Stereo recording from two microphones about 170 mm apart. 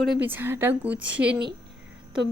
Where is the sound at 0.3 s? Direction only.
10° right (ahead or behind).